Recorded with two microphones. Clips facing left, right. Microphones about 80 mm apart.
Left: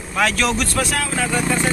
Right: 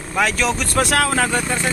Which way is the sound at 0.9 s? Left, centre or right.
Right.